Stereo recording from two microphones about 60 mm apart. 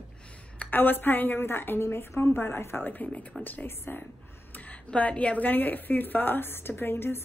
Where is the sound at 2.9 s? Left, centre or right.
Left.